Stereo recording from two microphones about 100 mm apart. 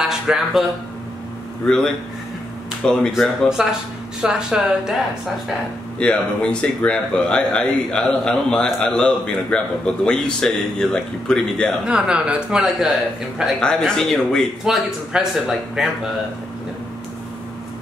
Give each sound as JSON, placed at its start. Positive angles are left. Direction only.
{"t": 0.0, "sound": "speech", "side_deg": -5}
{"t": 1.7, "sound": "speech", "side_deg": 5}
{"t": 3.6, "sound": "speech", "side_deg": -5}
{"t": 5.9, "sound": "speech", "side_deg": 10}
{"t": 11.8, "sound": "speech", "side_deg": -10}